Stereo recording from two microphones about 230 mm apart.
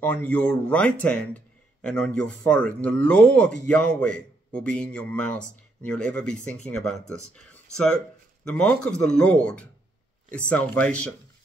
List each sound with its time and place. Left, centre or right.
0.0 s speech: centre
7.5 s a sound: centre
8.5 s speech: centre